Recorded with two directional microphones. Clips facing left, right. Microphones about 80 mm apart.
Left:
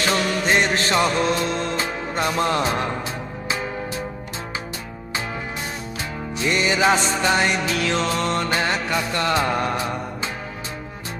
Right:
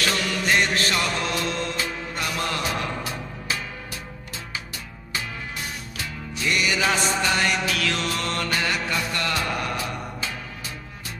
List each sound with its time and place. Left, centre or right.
0.0 s music: left
5.9 s music: left